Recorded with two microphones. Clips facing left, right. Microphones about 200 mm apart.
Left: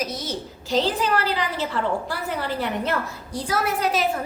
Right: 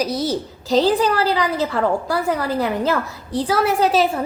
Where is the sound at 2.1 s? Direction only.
90° right.